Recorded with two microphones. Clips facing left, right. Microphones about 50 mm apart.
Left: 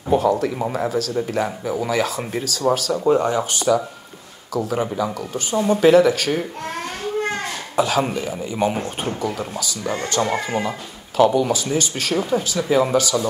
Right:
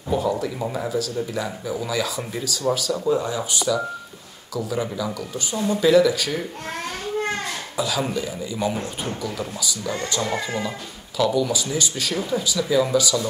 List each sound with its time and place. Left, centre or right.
0.2 s a sound: left
0.8 s speech: left
7.7 s a man's voice: left